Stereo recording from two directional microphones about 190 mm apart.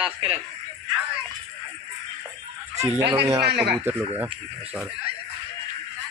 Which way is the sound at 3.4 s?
60° right (ahead or behind).